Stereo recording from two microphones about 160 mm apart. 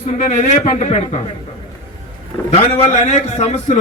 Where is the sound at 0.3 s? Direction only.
50° left (ahead or behind).